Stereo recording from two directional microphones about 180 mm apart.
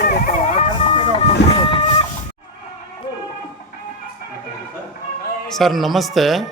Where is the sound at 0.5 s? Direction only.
35° left (ahead or behind).